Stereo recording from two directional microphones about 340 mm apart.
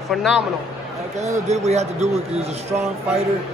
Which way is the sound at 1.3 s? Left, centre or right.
Centre.